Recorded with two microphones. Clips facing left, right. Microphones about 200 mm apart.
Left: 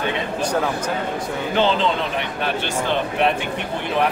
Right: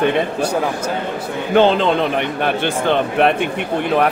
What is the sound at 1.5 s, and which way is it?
A man's voice, 55° right (ahead or behind).